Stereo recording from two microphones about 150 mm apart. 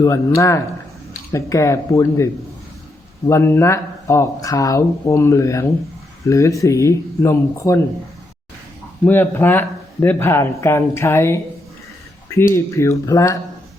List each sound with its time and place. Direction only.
0.0 s speech: 20° left (ahead or behind)
9.0 s a man's voice: 15° left (ahead or behind)
12.5 s speech: 20° left (ahead or behind)